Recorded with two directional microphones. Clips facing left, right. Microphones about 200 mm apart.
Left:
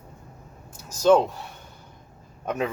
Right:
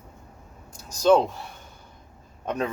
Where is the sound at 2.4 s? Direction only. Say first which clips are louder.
Left 1 dB; 10° left (ahead or behind).